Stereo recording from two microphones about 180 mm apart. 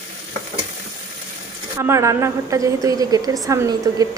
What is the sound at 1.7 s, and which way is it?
A woman's voice, 15° right (ahead or behind).